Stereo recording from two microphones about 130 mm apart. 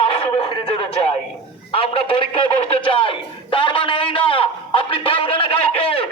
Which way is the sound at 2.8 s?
40° left (ahead or behind).